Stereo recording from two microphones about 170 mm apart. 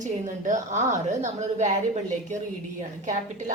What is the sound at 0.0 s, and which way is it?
Speech, 45° right (ahead or behind).